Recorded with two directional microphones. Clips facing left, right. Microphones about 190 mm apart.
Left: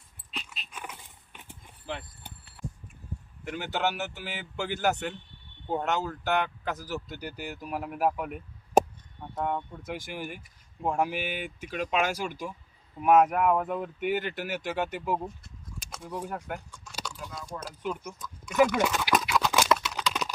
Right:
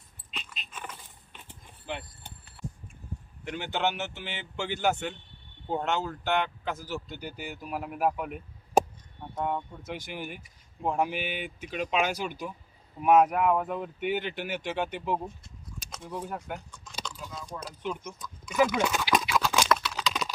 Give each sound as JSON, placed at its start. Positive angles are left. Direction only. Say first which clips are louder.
{"t": 0.3, "sound": "dog", "louder": "left 1 dB", "side_deg": 5}
{"t": 3.4, "sound": "a man's voice", "louder": "even", "side_deg": 5}
{"t": 11.2, "sound": "speech", "louder": "even", "side_deg": 45}
{"t": 11.7, "sound": "a man's voice", "louder": "even", "side_deg": 0}
{"t": 16.3, "sound": "keys jangling", "louder": "left 1 dB", "side_deg": 0}
{"t": 17.7, "sound": "a sound", "louder": "left 1 dB", "side_deg": 5}